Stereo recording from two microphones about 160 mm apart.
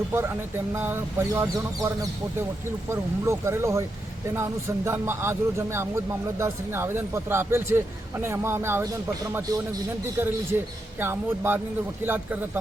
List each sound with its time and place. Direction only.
0.7 s speech: 15° right (ahead or behind)
4.9 s speech: 15° right (ahead or behind)